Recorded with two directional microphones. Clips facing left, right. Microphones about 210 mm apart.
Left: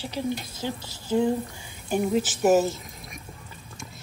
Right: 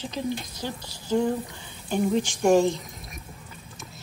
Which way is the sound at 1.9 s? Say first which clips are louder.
Even; 5° left (ahead or behind).